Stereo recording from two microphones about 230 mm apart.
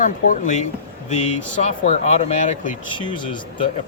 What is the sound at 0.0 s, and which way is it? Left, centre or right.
Speech, left.